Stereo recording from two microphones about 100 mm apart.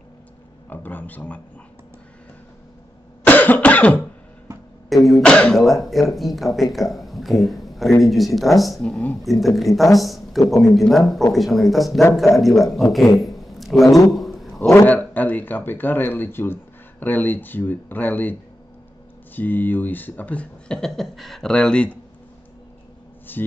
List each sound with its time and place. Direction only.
0.7 s speech: 20° left (ahead or behind)
3.3 s cough: 15° left (ahead or behind)
4.8 s a man's voice: centre (ahead or behind)
13.2 s a sound: centre (ahead or behind)
13.8 s a man's voice: 35° left (ahead or behind)
14.1 s a sound: centre (ahead or behind)
14.9 s speech: 15° left (ahead or behind)
19.3 s speech: 20° left (ahead or behind)
23.3 s speech: 20° left (ahead or behind)